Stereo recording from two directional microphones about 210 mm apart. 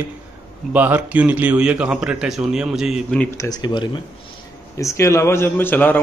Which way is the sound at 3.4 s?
20° left (ahead or behind).